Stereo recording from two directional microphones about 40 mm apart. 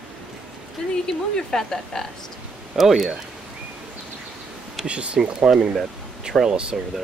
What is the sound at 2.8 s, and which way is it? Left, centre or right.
Speech, centre.